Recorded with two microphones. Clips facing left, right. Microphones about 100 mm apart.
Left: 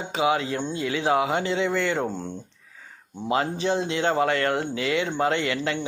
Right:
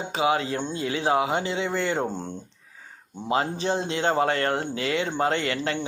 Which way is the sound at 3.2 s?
30° right (ahead or behind).